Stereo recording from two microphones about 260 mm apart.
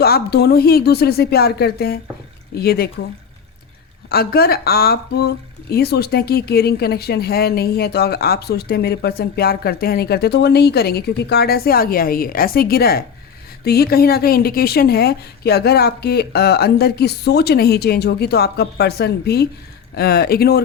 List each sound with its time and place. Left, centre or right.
0.0 s speech: left
4.1 s speech: left